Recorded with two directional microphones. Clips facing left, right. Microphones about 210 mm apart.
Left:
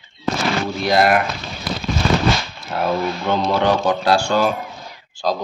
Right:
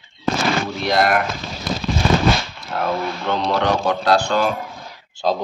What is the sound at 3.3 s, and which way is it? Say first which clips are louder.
Speech: left 2 dB; 5° left (ahead or behind).